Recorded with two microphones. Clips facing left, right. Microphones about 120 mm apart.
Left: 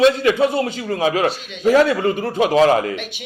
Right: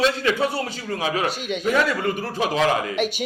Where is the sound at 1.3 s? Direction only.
50° right (ahead or behind).